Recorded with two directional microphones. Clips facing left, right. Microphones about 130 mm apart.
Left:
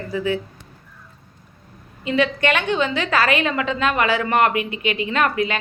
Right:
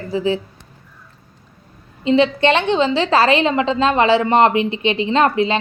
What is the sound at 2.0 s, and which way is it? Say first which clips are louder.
A woman's voice: right 5 dB; 25° right (ahead or behind).